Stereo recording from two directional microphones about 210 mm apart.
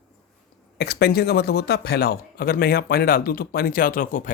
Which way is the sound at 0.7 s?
50° left (ahead or behind).